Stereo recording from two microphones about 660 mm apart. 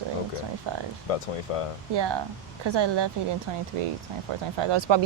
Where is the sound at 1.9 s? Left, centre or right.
Right.